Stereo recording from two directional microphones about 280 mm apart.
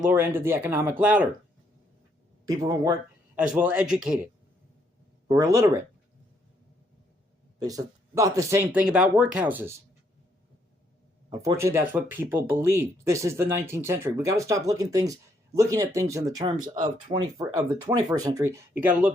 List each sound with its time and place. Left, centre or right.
0.0 s speech: centre
2.5 s speech: centre
5.3 s speech: centre
7.6 s speech: centre
11.3 s speech: centre
16.4 s speech: right
17.1 s speech: centre